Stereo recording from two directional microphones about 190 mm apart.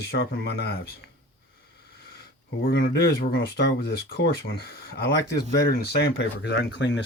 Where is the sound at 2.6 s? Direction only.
50° left (ahead or behind).